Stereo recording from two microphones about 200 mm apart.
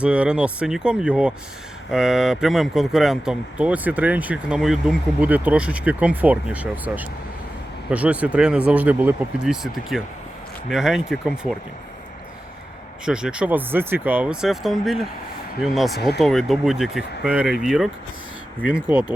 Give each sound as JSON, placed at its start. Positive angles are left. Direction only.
{"t": 0.0, "sound": "speech", "side_deg": -5}
{"t": 13.1, "sound": "speech", "side_deg": -5}
{"t": 16.0, "sound": "speech", "side_deg": 55}
{"t": 16.2, "sound": "speech", "side_deg": 0}